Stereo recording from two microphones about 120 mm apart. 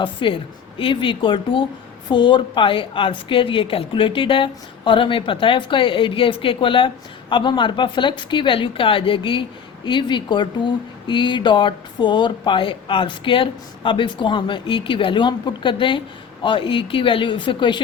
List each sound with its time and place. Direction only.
0.0 s speech: 45° left (ahead or behind)